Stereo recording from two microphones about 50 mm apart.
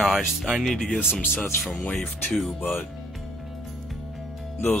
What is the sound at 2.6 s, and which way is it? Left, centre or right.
Speech, left.